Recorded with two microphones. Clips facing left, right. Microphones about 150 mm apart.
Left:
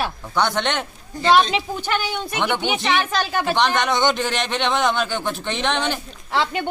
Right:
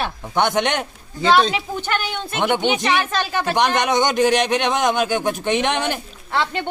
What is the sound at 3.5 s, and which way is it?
Speech, 15° right (ahead or behind).